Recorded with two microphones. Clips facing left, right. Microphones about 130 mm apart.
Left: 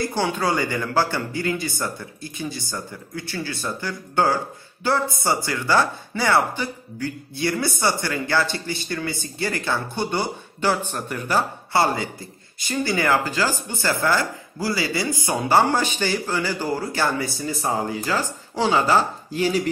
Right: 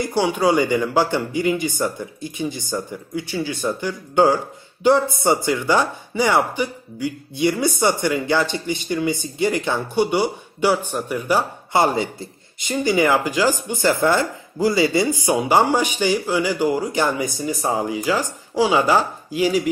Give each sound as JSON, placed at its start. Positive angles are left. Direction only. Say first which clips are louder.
{"t": 0.0, "sound": "speech", "louder": "right 4 dB", "side_deg": -15}